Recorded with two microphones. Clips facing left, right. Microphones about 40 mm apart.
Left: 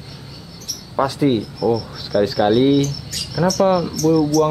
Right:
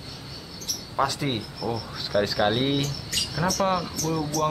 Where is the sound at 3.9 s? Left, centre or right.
Right.